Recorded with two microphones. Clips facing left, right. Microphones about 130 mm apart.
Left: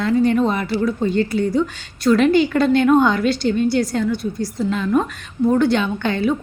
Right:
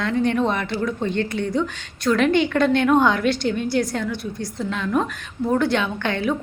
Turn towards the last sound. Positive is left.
turn(degrees=0)  # may be behind; listen again after turning